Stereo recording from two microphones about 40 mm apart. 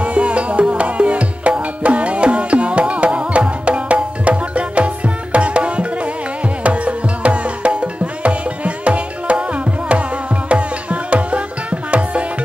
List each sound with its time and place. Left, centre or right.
0.0 s music: right